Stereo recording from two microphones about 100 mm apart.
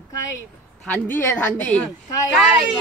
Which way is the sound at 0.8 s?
20° left (ahead or behind).